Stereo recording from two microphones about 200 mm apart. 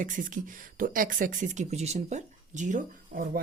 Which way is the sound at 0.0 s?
40° right (ahead or behind).